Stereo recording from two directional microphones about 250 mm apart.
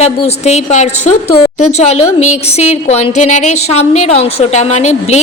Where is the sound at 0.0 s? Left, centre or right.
Left.